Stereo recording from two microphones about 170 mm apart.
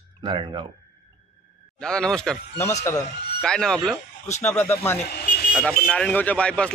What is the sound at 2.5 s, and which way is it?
Speech, 15° left (ahead or behind).